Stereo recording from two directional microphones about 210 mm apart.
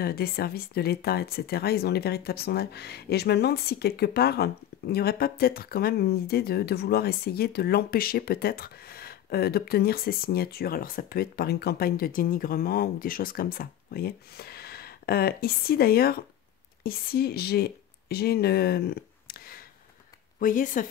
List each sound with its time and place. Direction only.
0.0 s speech: 45° left (ahead or behind)